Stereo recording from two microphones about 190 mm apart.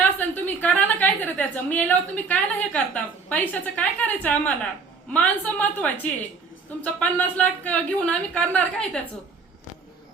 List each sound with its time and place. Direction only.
0.0 s a woman's voice: 10° left (ahead or behind)